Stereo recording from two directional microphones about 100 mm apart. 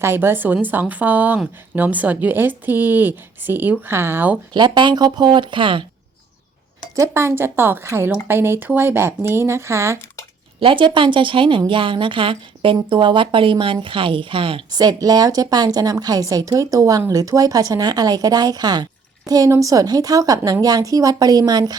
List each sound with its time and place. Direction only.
0.0 s speech: 25° right (ahead or behind)
4.5 s speech: 45° right (ahead or behind)
6.9 s speech: 30° right (ahead or behind)
10.6 s a woman's voice: 55° right (ahead or behind)
14.7 s a woman's voice: 40° right (ahead or behind)
19.5 s a woman's voice: 35° right (ahead or behind)